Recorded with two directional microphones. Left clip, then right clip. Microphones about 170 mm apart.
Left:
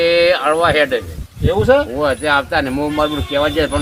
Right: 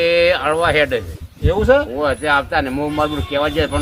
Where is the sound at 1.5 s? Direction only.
15° left (ahead or behind).